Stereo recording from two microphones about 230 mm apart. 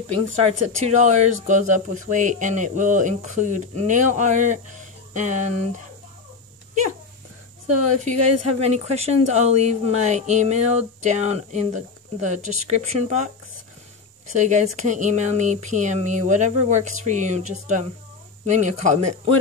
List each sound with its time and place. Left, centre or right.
0.8 s speech: right
8.0 s speech: right
14.3 s speech: right